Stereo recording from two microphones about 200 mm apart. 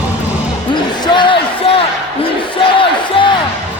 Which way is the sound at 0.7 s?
25° left (ahead or behind).